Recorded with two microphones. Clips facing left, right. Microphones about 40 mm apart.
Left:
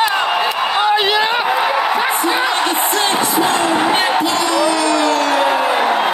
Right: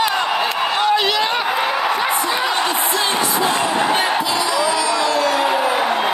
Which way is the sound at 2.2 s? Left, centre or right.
Left.